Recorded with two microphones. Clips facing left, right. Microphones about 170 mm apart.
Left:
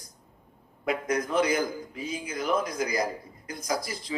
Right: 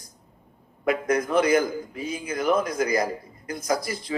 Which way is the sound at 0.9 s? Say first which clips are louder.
Right 4 dB; 55° right (ahead or behind).